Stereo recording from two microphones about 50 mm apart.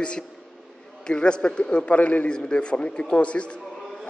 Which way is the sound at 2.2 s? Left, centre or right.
Centre.